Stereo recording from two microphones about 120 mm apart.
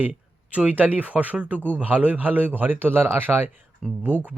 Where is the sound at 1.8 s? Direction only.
15° right (ahead or behind).